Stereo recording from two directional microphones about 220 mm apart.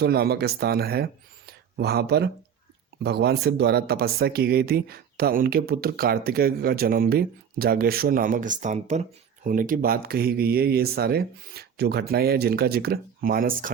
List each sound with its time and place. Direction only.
0.0 s speech: 45° right (ahead or behind)